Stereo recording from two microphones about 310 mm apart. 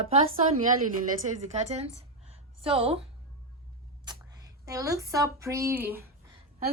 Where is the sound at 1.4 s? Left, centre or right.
Right.